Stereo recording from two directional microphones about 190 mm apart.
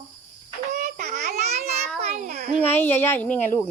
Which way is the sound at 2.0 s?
40° right (ahead or behind).